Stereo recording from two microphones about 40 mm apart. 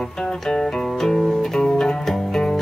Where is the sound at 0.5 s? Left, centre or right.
Centre.